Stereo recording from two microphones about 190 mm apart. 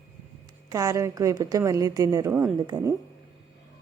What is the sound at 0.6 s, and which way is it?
A woman's voice, 15° right (ahead or behind).